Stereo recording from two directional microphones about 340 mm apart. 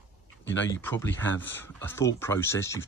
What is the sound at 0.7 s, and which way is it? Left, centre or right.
Speech, centre.